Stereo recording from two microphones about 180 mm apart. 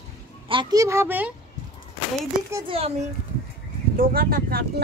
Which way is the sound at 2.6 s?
30° right (ahead or behind).